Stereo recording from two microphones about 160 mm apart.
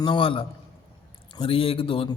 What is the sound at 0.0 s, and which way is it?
Speech, 30° left (ahead or behind).